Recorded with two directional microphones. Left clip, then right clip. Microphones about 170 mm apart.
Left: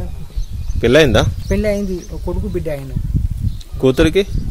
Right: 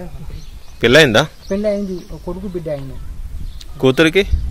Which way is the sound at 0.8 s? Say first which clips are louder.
Right 1 dB; 10° left (ahead or behind).